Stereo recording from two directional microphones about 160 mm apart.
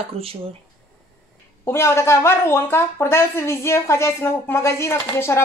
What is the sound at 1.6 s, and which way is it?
Speech, 15° left (ahead or behind).